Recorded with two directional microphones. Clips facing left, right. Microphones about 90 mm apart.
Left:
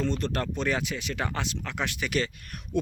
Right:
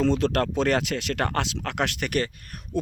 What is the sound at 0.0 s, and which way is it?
Speech, 90° right.